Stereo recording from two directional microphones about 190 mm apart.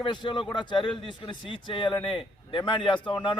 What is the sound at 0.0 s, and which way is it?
A man's voice, 25° left (ahead or behind).